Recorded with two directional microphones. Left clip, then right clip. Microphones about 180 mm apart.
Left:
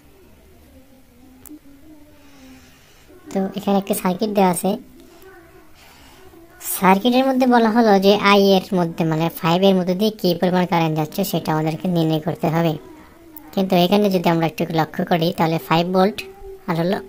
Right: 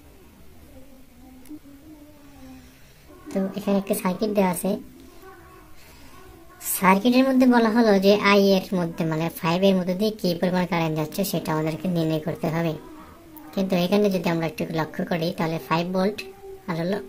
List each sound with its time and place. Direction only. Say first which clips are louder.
3.3 s a woman's voice: left 4 dB; 25° left (ahead or behind)
6.6 s a woman's voice: left 4 dB; 25° left (ahead or behind)